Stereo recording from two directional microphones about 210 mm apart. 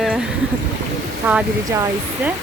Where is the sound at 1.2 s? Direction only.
10° right (ahead or behind).